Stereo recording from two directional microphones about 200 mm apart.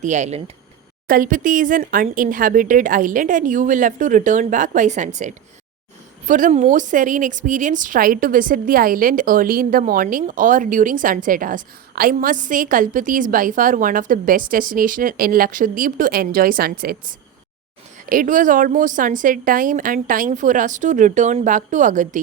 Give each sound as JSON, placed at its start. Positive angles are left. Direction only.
{"t": 0.0, "sound": "speech", "side_deg": -35}
{"t": 1.0, "sound": "a woman's voice", "side_deg": -45}